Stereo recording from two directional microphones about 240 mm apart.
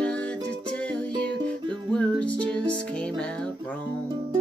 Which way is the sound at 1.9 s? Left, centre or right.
Centre.